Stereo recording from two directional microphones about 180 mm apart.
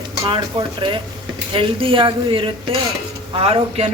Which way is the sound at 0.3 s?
25° right (ahead or behind).